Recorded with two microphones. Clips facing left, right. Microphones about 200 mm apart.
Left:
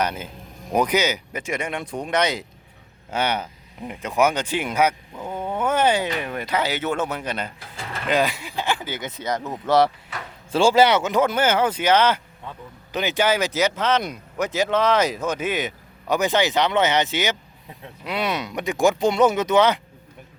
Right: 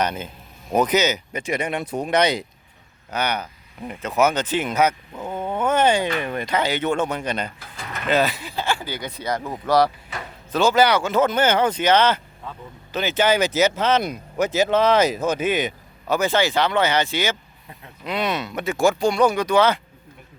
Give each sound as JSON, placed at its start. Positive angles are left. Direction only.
{"t": 0.0, "sound": "speech", "side_deg": 10}
{"t": 1.5, "sound": "speech", "side_deg": -40}
{"t": 2.0, "sound": "speech", "side_deg": 0}
{"t": 3.1, "sound": "speech", "side_deg": 25}
{"t": 3.8, "sound": "speech", "side_deg": 15}
{"t": 7.8, "sound": "vehicle", "side_deg": 30}
{"t": 8.0, "sound": "speech", "side_deg": 15}
{"t": 13.5, "sound": "speech", "side_deg": -25}
{"t": 14.0, "sound": "speech", "side_deg": -5}
{"t": 16.0, "sound": "speech", "side_deg": 15}